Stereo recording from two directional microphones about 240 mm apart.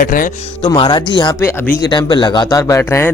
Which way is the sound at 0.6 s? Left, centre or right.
Centre.